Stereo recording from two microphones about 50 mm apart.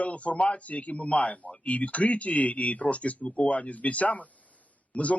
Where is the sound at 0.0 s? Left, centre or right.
Left.